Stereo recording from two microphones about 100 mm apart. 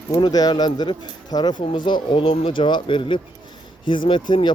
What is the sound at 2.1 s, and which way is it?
Speech, 65° left (ahead or behind).